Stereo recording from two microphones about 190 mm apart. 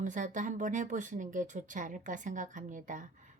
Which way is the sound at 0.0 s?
40° right (ahead or behind).